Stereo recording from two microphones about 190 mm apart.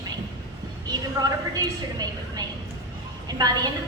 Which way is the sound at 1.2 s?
20° right (ahead or behind).